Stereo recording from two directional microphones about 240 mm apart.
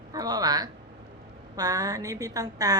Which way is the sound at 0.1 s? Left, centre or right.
Centre.